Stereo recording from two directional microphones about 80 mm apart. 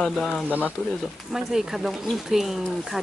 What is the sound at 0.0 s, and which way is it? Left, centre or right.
Speech, centre.